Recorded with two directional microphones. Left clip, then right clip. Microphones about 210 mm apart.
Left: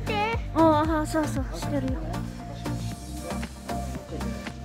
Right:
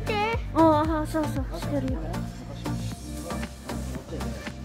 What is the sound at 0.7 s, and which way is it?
Music, 20° left (ahead or behind).